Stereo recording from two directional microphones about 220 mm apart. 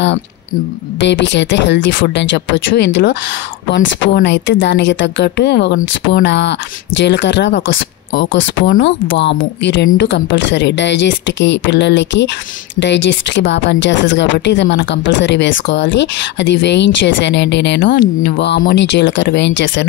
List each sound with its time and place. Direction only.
1.0 s a woman's voice: 55° left (ahead or behind)
8.7 s a woman's voice: 40° left (ahead or behind); by 19.9 s 55° left (ahead or behind)